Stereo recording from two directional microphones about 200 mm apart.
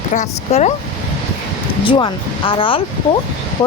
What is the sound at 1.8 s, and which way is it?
Speech, 25° left (ahead or behind).